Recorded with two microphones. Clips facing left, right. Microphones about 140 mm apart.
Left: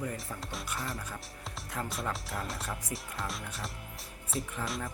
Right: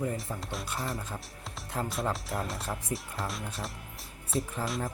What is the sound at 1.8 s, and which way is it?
Speech, 30° right (ahead or behind).